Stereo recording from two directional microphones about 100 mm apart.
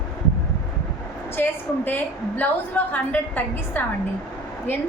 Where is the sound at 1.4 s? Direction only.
20° left (ahead or behind).